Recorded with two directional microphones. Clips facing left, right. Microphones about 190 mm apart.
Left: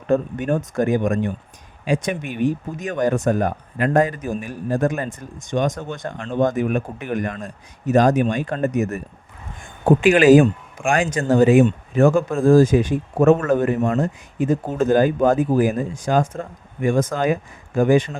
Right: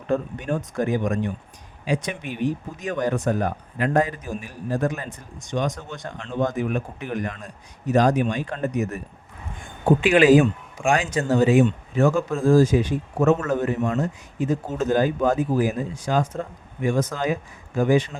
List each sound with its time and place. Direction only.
0.1 s speech: 50° left (ahead or behind)
10.0 s speech: 45° left (ahead or behind)